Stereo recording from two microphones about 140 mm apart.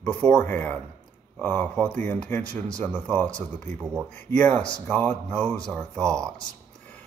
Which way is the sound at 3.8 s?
20° right (ahead or behind).